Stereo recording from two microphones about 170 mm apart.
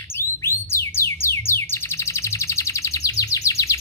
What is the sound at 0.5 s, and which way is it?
Bird, 15° left (ahead or behind).